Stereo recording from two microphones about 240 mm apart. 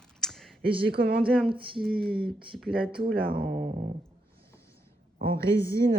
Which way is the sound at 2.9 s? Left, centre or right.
Right.